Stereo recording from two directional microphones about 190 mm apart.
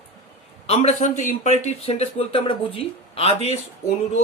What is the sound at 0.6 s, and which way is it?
A man's voice, 30° left (ahead or behind).